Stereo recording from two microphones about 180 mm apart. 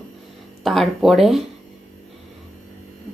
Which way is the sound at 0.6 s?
Centre (ahead or behind).